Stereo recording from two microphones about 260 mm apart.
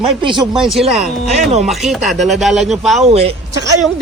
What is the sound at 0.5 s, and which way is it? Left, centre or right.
A man's voice, centre.